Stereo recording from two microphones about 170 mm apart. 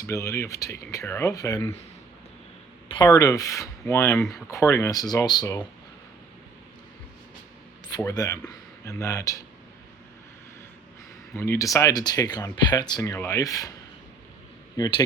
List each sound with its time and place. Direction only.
0.1 s speech: 15° left (ahead or behind)
2.9 s speech: 25° left (ahead or behind)
7.9 s speech: 20° left (ahead or behind)
11.3 s speech: 15° left (ahead or behind)
14.8 s speech: 25° left (ahead or behind)